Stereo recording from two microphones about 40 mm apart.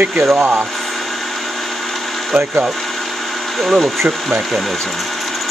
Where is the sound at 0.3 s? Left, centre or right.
Right.